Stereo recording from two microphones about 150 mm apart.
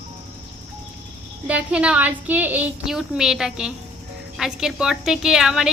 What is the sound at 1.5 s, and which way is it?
A woman's voice, 10° right (ahead or behind).